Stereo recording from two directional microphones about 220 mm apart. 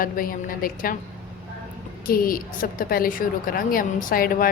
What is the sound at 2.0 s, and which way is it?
A woman's voice, 40° left (ahead or behind).